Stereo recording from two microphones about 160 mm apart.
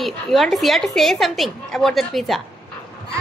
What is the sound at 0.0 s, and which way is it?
A woman's voice, centre (ahead or behind).